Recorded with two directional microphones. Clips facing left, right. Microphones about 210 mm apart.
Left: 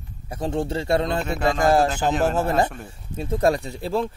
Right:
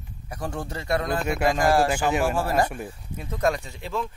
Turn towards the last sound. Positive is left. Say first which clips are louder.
# left 6 dB
turn(degrees=35)  # may be behind; listen again after turning